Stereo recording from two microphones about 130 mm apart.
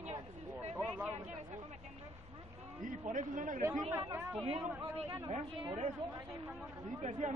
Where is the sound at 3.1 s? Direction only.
80° right.